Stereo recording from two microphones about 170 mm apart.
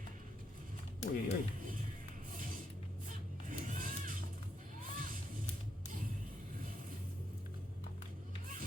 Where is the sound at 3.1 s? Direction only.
50° right (ahead or behind).